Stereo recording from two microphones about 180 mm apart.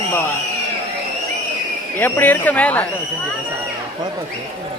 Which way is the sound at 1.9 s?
10° left (ahead or behind).